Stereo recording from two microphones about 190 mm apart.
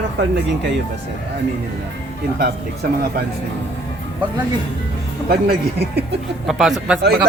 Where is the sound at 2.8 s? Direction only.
50° right (ahead or behind).